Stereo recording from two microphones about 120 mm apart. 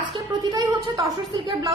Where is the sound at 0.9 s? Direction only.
30° right (ahead or behind).